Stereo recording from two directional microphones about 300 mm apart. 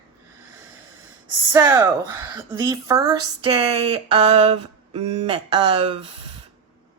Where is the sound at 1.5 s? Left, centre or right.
Centre.